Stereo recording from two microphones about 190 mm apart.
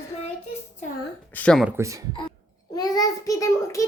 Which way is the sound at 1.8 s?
15° right (ahead or behind).